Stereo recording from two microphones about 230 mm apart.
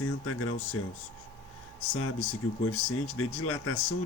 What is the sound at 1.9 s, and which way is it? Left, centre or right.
Speech, left.